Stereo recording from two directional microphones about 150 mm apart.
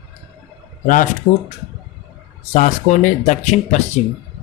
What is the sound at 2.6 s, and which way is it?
Speech, 60° left (ahead or behind).